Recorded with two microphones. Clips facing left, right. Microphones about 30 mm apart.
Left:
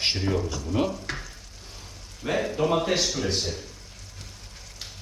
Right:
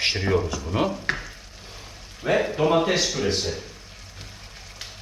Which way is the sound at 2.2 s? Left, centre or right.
Right.